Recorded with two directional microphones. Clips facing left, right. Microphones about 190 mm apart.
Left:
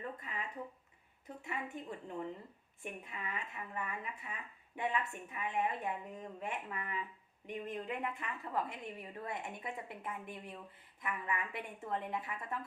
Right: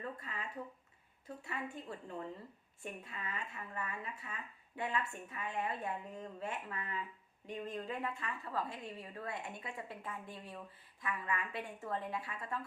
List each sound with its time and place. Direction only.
0.2 s a woman's voice: 15° left (ahead or behind)